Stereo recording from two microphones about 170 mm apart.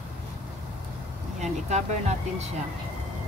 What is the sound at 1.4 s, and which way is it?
Speech, 40° right (ahead or behind).